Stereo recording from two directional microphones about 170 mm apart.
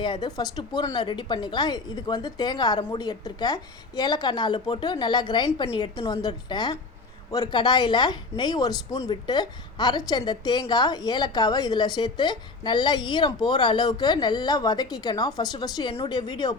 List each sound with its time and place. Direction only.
0.0 s a woman's voice: 25° left (ahead or behind)